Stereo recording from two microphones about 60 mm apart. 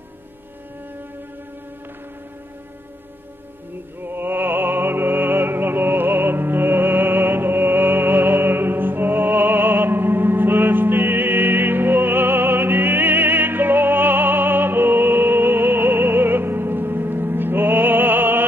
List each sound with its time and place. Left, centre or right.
4.0 s music: right